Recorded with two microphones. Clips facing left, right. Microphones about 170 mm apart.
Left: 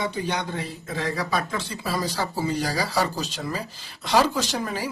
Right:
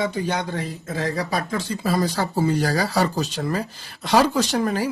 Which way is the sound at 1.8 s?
50° right (ahead or behind).